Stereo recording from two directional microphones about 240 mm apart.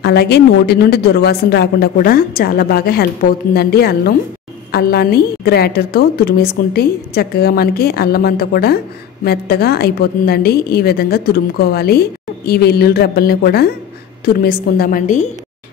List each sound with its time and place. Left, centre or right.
0.0 s a woman's voice: left